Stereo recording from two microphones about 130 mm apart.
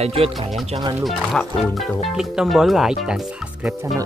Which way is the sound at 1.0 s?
Centre (ahead or behind).